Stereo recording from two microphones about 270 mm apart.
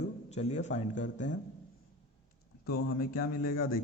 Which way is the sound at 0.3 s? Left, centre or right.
Left.